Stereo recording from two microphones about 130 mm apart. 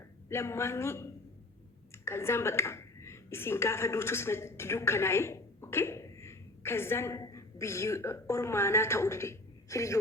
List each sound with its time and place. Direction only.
0.3 s a man's voice: 20° left (ahead or behind)